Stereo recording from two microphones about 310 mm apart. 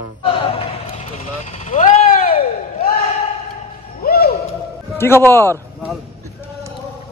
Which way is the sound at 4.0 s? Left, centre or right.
Left.